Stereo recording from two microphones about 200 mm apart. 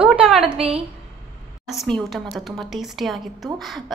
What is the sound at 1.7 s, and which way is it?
Speech, centre (ahead or behind).